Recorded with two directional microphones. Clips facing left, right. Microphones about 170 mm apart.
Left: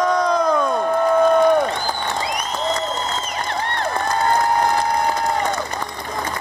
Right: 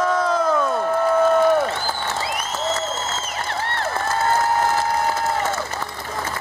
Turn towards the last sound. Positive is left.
turn(degrees=15)  # may be behind; listen again after turning